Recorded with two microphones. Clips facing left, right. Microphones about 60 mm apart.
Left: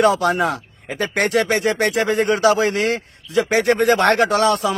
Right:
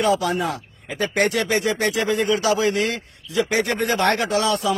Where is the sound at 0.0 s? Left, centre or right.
Left.